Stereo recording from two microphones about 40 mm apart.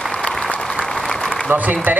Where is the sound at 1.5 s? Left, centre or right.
Right.